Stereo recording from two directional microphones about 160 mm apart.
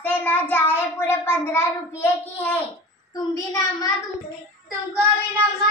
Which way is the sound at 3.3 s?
20° left (ahead or behind).